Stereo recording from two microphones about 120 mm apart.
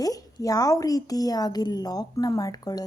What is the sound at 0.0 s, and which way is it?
A woman's voice, 30° left (ahead or behind).